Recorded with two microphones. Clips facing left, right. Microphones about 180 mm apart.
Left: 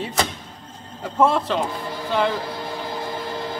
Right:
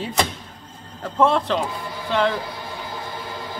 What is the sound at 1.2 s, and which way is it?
Speech, 5° left (ahead or behind).